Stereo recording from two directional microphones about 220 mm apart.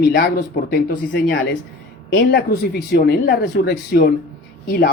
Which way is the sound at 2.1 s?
50° left (ahead or behind).